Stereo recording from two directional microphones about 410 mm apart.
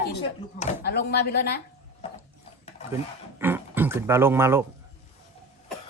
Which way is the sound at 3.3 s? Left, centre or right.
Centre.